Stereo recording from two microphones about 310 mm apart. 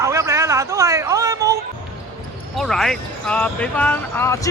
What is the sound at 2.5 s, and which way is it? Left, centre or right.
Speech, centre.